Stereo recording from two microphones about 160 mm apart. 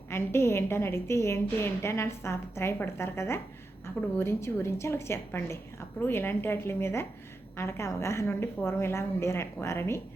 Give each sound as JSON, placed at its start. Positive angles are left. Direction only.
{"t": 0.1, "sound": "a woman's voice", "side_deg": 15}